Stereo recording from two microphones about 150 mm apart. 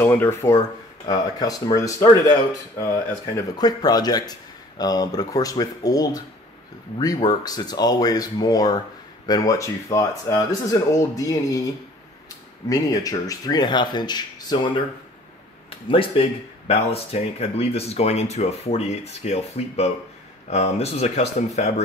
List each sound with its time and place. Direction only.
0.0 s speech: 15° left (ahead or behind)
15.9 s speech: 35° left (ahead or behind)